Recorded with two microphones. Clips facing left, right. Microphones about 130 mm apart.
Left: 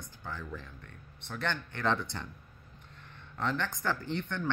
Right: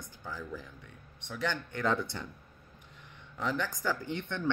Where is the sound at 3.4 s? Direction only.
5° right (ahead or behind).